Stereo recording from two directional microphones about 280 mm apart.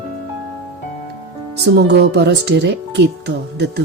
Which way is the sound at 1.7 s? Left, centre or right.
Right.